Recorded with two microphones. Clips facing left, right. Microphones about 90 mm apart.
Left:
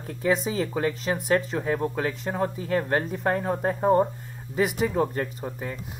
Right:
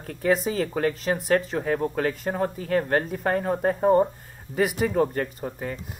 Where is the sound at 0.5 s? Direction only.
45° right (ahead or behind).